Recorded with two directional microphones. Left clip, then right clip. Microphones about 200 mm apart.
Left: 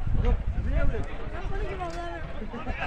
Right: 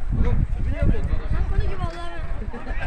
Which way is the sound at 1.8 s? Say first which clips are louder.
Right 1 dB; 40° left (ahead or behind).